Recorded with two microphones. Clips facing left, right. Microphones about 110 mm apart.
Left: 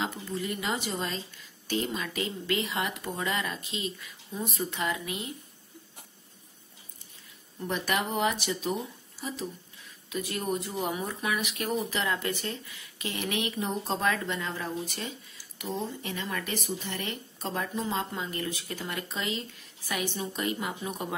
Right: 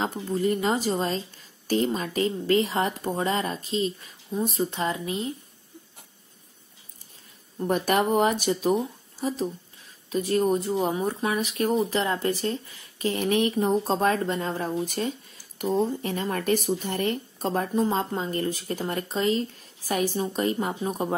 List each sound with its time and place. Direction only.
0.0 s speech: 40° right (ahead or behind)
7.5 s speech: 45° right (ahead or behind)
10.0 s speech: 35° right (ahead or behind)